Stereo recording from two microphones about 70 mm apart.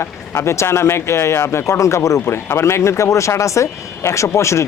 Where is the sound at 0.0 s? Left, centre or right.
Left.